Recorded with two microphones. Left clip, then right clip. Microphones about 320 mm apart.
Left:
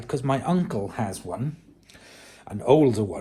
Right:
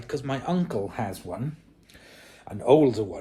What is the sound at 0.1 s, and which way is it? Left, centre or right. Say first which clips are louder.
Speech: left 4 dB; centre.